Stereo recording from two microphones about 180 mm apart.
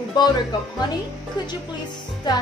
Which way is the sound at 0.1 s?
25° left (ahead or behind).